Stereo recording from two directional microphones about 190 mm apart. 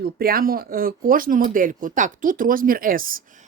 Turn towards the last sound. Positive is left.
turn(degrees=-45)  # may be behind; listen again after turning